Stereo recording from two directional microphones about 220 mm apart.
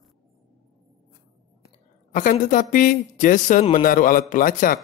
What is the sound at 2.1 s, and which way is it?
Speech, 35° left (ahead or behind).